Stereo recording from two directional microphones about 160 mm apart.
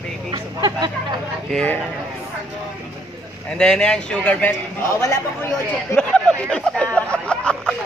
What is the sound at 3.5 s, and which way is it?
A man's voice, 5° left (ahead or behind).